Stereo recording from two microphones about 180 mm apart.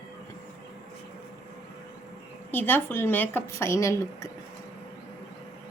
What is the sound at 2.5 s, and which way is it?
A woman's voice, 10° left (ahead or behind).